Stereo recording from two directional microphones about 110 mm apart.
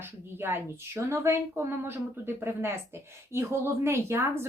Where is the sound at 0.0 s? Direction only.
20° right (ahead or behind).